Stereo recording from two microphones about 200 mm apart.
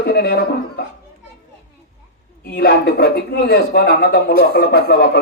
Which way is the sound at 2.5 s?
50° left (ahead or behind).